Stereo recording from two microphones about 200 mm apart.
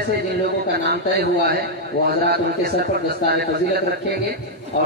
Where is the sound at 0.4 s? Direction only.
50° right (ahead or behind).